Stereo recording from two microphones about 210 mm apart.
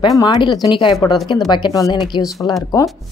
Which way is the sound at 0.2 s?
20° left (ahead or behind).